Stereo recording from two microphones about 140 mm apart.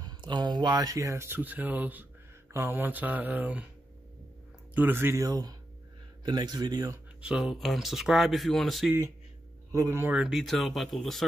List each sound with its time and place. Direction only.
0.0 s speech: 30° right (ahead or behind); by 3.6 s 10° right (ahead or behind)
4.7 s speech: 15° right (ahead or behind)
7.2 s speech: 5° right (ahead or behind)
9.7 s speech: 20° right (ahead or behind)
10.1 s speech: 5° right (ahead or behind)